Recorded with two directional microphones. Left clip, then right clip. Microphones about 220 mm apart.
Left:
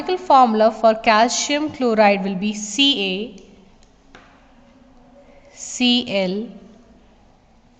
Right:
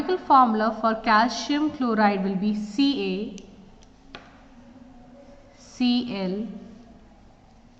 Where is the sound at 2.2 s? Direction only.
90° left.